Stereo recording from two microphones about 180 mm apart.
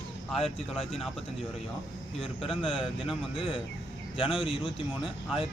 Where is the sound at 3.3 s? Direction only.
30° left (ahead or behind).